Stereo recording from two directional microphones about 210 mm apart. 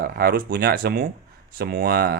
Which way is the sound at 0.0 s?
45° right (ahead or behind).